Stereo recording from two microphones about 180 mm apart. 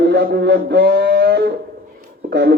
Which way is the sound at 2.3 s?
60° right (ahead or behind).